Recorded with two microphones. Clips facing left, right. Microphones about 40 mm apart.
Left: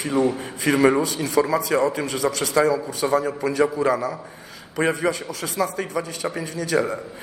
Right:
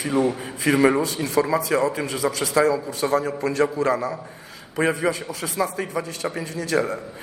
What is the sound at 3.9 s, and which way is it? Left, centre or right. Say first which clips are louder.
Speech: even; centre.